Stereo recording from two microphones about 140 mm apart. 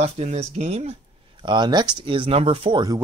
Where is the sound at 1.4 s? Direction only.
35° right (ahead or behind).